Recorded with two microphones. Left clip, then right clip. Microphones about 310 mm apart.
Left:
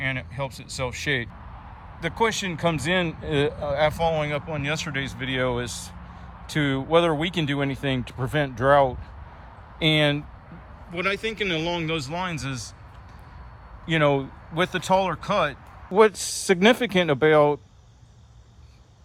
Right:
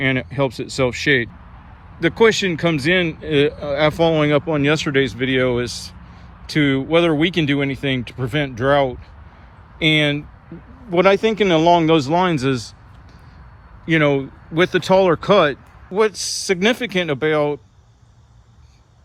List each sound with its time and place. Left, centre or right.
0.0 s speech: centre
10.9 s speech: centre
13.8 s speech: centre
15.9 s speech: centre